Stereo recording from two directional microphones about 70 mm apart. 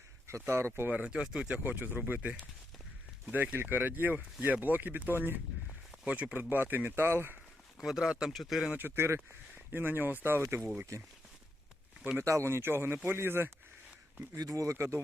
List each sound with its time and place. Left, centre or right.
0.3 s speech: right
0.9 s speech: centre; by 7.3 s right
7.8 s speech: centre
8.7 s speech: right
10.9 s speech: right
12.2 s speech: right
14.3 s speech: right